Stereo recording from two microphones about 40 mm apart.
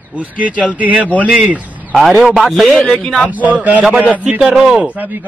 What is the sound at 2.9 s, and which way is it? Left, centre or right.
Speech, centre.